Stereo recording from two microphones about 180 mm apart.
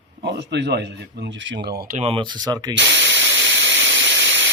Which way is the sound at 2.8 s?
90° right.